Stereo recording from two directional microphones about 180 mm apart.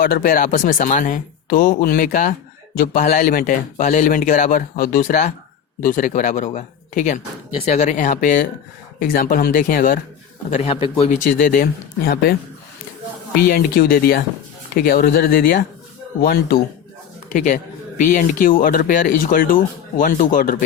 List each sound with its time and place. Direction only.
0.0 s speech: 50° left (ahead or behind)
10.5 s speech: 35° left (ahead or behind)
11.6 s speech: 60° left (ahead or behind)
17.3 s speech: 45° left (ahead or behind)